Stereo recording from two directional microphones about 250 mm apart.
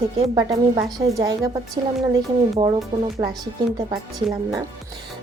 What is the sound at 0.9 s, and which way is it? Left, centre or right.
Speech, centre.